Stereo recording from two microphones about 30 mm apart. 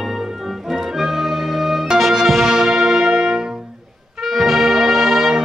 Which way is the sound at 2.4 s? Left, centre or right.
Right.